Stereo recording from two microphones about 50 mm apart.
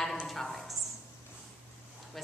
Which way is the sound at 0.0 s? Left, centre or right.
Centre.